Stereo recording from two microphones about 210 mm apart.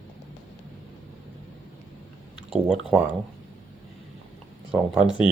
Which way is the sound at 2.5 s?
5° right (ahead or behind).